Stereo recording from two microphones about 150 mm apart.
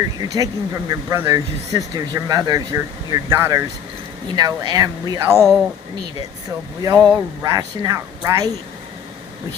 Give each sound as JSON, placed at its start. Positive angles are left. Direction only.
{"t": 0.3, "sound": "speech", "side_deg": -20}
{"t": 6.8, "sound": "speech", "side_deg": -20}